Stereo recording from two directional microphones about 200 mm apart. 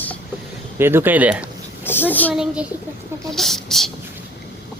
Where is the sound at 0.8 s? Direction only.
10° right (ahead or behind).